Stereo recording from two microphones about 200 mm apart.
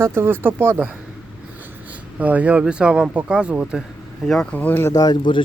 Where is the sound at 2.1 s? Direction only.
5° right (ahead or behind).